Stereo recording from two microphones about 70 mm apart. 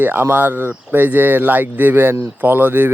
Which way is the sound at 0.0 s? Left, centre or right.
Right.